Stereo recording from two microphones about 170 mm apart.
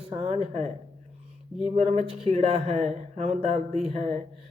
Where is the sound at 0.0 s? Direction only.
35° right (ahead or behind).